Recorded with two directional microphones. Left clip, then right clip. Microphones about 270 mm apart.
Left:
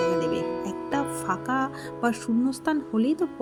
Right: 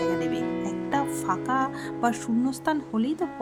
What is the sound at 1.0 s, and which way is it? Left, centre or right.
Speech, centre.